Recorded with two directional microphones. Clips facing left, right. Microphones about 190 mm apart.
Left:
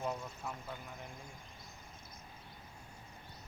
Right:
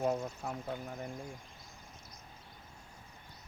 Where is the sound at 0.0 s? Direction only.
50° right (ahead or behind).